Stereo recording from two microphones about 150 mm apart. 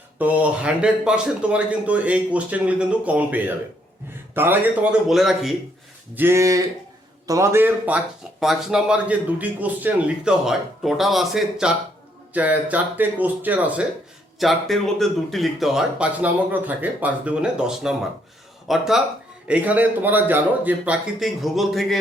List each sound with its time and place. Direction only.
0.2 s speech: 10° right (ahead or behind)
6.1 s speech: 15° right (ahead or behind)
14.3 s speech: centre (ahead or behind)